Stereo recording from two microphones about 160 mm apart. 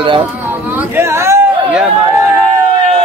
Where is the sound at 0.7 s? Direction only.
15° right (ahead or behind).